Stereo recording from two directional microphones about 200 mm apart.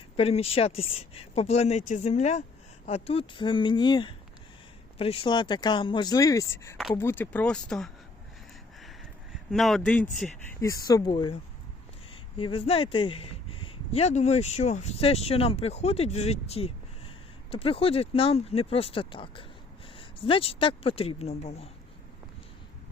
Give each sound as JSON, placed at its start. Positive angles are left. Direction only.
{"t": 0.2, "sound": "speech", "side_deg": 30}
{"t": 8.8, "sound": "a sound", "side_deg": 0}
{"t": 10.7, "sound": "speech", "side_deg": 15}
{"t": 12.4, "sound": "speech", "side_deg": 25}